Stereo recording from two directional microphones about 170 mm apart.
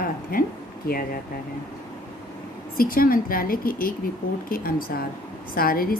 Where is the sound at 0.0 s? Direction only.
60° left (ahead or behind).